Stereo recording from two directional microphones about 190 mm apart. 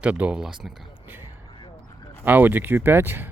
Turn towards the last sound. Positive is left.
turn(degrees=-10)  # may be behind; listen again after turning